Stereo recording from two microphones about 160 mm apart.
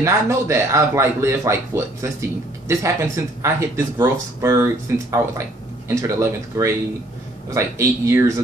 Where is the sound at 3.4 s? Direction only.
15° right (ahead or behind).